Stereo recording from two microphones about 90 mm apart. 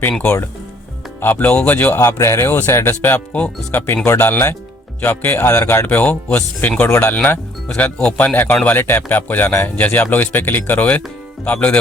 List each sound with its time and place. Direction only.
1.2 s speech: 20° left (ahead or behind)
2.0 s a man's voice: 30° left (ahead or behind); by 11.8 s 15° left (ahead or behind)